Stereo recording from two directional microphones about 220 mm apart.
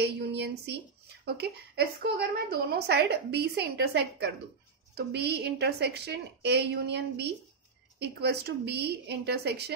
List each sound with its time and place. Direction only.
0.0 s speech: 50° right (ahead or behind)